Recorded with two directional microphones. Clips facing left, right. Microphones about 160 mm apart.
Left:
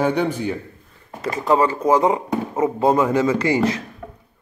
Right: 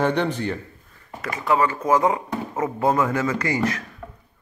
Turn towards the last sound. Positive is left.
turn(degrees=25)  # may be behind; listen again after turning